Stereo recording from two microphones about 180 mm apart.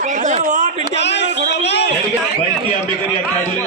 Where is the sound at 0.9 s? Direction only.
75° left (ahead or behind).